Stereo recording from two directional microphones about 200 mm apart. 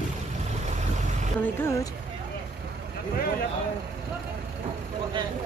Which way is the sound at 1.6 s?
15° left (ahead or behind).